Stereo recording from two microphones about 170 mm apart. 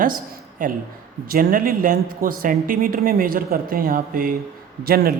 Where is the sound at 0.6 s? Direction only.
50° right (ahead or behind).